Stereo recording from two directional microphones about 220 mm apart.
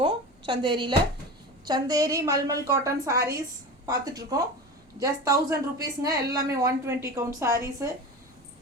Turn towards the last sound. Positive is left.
turn(degrees=-10)  # may be behind; listen again after turning